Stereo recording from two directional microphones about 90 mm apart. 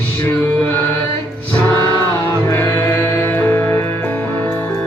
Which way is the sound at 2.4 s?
35° left (ahead or behind).